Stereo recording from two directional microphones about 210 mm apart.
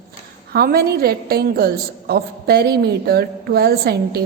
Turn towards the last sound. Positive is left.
turn(degrees=-50)  # may be behind; listen again after turning